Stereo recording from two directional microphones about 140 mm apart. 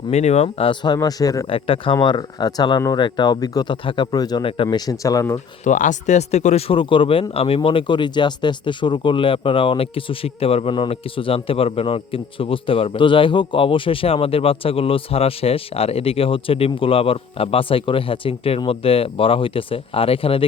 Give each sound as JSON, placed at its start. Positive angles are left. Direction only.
{"t": 0.1, "sound": "speech", "side_deg": 50}
{"t": 1.5, "sound": "speech", "side_deg": 40}
{"t": 4.9, "sound": "speech", "side_deg": 25}
{"t": 5.6, "sound": "speech", "side_deg": 65}